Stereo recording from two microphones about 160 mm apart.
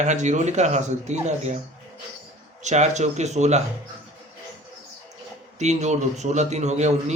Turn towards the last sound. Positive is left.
turn(degrees=-45)  # may be behind; listen again after turning